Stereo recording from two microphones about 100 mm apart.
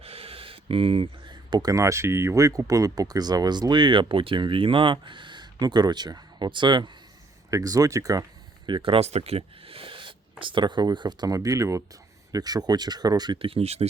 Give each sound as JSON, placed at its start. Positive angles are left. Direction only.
{"t": 0.0, "sound": "a sound", "side_deg": -80}
{"t": 1.3, "sound": "speech", "side_deg": -45}
{"t": 7.5, "sound": "speech", "side_deg": -35}
{"t": 8.6, "sound": "speech", "side_deg": -55}
{"t": 13.4, "sound": "speech", "side_deg": -80}